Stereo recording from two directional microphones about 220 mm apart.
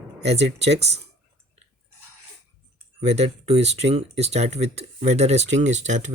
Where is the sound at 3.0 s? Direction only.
30° right (ahead or behind).